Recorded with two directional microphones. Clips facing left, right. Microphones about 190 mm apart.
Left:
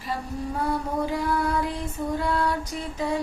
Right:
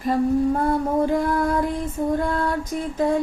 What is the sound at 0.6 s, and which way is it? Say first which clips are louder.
Female singing: right 6 dB; 50° right (ahead or behind).